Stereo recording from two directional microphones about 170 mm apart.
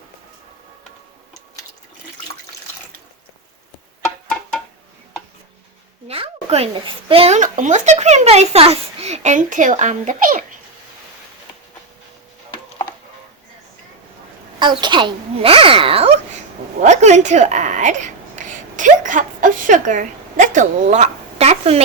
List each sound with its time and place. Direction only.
6.1 s a child's voice: 35° right (ahead or behind); by 10.4 s 50° right (ahead or behind)
14.6 s a child's voice: 25° right (ahead or behind)